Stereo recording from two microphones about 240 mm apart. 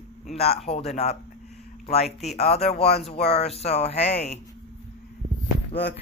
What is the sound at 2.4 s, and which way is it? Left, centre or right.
Speech, left.